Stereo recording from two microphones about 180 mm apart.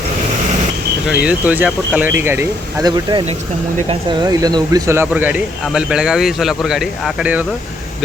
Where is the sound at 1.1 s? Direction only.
5° right (ahead or behind).